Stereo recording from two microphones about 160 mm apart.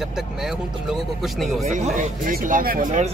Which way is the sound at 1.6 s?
50° right (ahead or behind).